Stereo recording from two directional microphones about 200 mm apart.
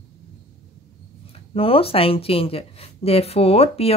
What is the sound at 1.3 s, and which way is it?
Speech, 30° left (ahead or behind).